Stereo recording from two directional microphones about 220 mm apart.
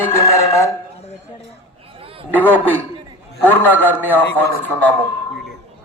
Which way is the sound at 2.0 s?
25° right (ahead or behind).